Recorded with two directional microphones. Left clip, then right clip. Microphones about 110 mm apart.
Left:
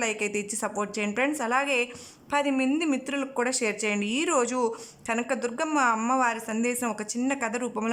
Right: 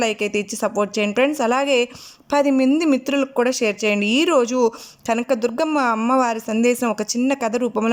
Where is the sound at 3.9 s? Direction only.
35° right (ahead or behind).